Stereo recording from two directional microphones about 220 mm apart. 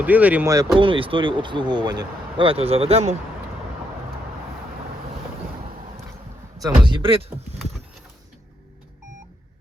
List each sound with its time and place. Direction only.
0.0 s speech: 5° right (ahead or behind); by 3.2 s 30° right (ahead or behind)
6.6 s speech: 20° right (ahead or behind)